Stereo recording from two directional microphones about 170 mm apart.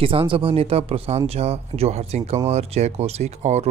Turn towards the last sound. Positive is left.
turn(degrees=-40)  # may be behind; listen again after turning